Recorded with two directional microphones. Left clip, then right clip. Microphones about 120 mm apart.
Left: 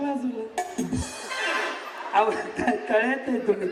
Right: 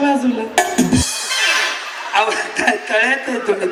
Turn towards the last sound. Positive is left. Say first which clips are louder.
# right 8 dB
turn(degrees=-25)  # may be behind; listen again after turning